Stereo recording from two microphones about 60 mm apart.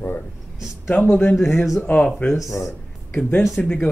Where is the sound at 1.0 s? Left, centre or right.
Left.